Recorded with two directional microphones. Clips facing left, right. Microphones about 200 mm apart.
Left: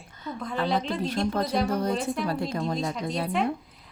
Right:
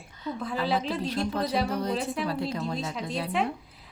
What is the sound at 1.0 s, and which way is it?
Speech, 45° left (ahead or behind).